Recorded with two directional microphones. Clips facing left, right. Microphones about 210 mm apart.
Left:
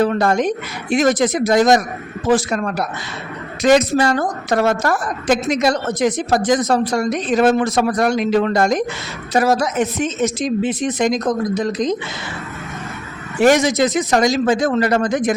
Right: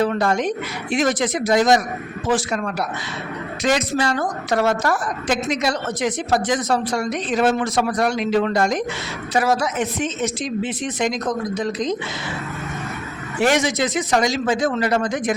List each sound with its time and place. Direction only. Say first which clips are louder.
0.0 s a woman's voice: left 3 dB; 45° left (ahead or behind)
13.4 s a woman's voice: left 5 dB; 40° left (ahead or behind)